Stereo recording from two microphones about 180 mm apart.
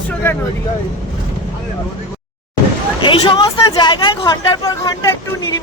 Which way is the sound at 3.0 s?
25° left (ahead or behind).